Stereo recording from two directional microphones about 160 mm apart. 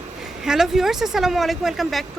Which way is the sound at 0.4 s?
5° right (ahead or behind).